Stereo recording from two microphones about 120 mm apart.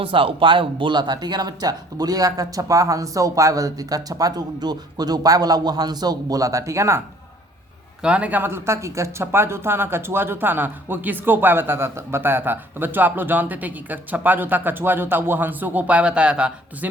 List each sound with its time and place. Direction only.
0.0 s speech: 50° right (ahead or behind); by 7.0 s 25° right (ahead or behind)
8.0 s speech: 10° right (ahead or behind)